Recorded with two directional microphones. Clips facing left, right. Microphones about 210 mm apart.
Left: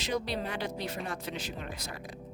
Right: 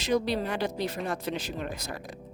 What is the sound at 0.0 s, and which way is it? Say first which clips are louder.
Speech: right 6 dB; 45° right (ahead or behind).